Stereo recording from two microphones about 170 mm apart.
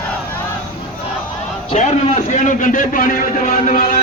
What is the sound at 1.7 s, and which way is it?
A man's voice, 40° left (ahead or behind).